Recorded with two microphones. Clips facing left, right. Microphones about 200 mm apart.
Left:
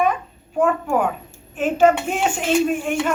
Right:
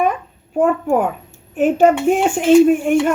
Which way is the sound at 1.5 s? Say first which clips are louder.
Right 3 dB; 55° right (ahead or behind).